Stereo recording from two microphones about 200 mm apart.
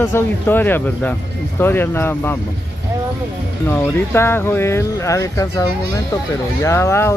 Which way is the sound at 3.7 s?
10° left (ahead or behind).